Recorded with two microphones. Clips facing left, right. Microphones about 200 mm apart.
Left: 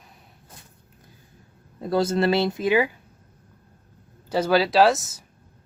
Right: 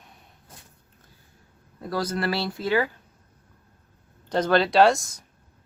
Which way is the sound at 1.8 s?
25° left (ahead or behind).